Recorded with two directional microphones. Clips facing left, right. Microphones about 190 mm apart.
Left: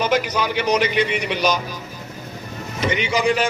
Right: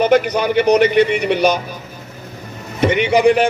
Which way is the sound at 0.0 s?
60° right (ahead or behind).